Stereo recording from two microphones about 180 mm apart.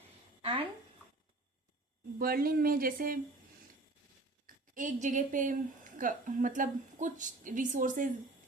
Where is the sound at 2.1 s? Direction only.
55° right (ahead or behind).